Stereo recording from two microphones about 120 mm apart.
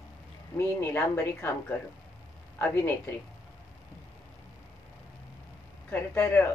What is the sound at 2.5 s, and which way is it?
Speech, 15° left (ahead or behind).